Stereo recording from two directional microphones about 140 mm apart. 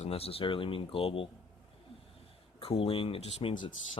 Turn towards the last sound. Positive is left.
turn(degrees=40)  # may be behind; listen again after turning